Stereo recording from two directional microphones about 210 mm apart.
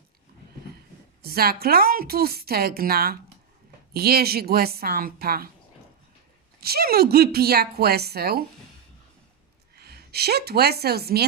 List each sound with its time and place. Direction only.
1.2 s a woman's voice: 45° right (ahead or behind)
6.6 s a woman's voice: 45° right (ahead or behind)
9.7 s speech: 50° right (ahead or behind)